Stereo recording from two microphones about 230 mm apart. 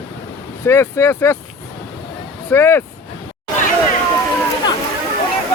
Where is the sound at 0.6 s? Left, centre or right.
Centre.